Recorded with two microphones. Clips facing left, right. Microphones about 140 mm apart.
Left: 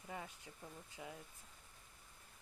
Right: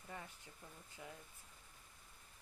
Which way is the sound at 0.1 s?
15° left (ahead or behind).